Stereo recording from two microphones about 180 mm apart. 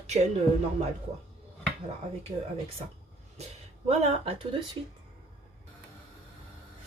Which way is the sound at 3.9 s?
30° right (ahead or behind).